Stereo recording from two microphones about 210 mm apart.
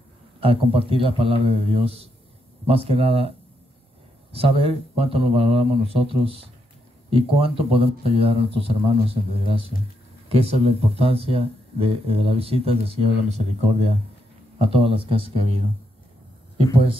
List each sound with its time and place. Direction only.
0.4 s speech: 25° right (ahead or behind)